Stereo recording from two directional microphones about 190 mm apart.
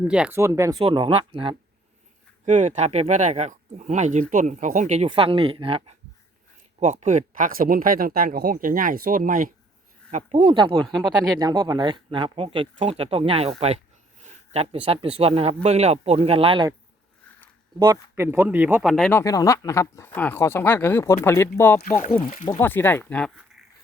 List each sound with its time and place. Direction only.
0.0 s speech: 5° right (ahead or behind)
0.8 s speech: 25° right (ahead or behind)
2.4 s speech: 40° right (ahead or behind)
10.8 s speech: centre (ahead or behind)
11.3 s speech: 20° right (ahead or behind)
17.7 s speech: 15° right (ahead or behind); by 19.2 s centre (ahead or behind)
19.2 s speech: 15° left (ahead or behind)
21.9 s speech: 40° left (ahead or behind)
22.4 s speech: 15° left (ahead or behind)